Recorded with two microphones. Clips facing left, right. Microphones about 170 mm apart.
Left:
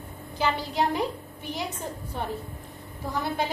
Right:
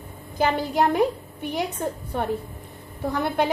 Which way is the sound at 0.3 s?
50° right (ahead or behind).